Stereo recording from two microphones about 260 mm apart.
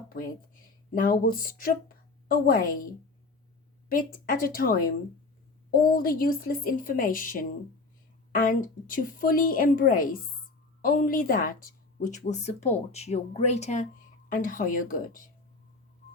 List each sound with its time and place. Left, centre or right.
0.1 s a woman's voice: left
3.8 s a woman's voice: left